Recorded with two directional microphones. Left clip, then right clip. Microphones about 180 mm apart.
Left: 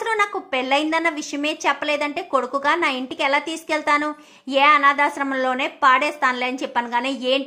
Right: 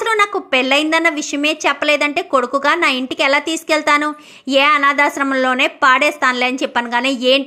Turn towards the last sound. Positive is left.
turn(degrees=-25)  # may be behind; listen again after turning